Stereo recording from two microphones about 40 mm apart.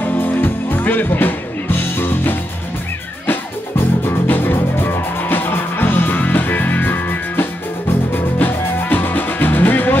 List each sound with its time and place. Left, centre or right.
0.0 s music: left